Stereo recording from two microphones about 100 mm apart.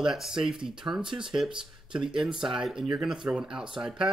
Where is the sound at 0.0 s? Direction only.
5° right (ahead or behind).